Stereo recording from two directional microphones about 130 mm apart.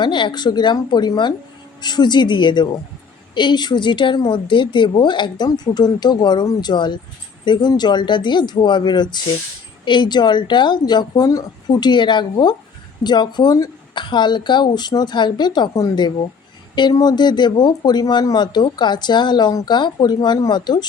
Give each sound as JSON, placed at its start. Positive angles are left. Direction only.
{"t": 0.0, "sound": "speech", "side_deg": 35}